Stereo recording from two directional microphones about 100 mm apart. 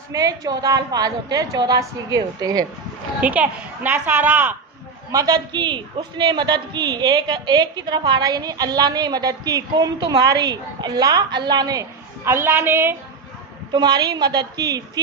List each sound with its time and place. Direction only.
0.1 s a woman's voice: 35° right (ahead or behind)
3.2 s a woman's voice: 15° right (ahead or behind)
5.1 s a woman's voice: 40° right (ahead or behind)
12.2 s a woman's voice: 25° right (ahead or behind)
13.7 s a woman's voice: 45° right (ahead or behind)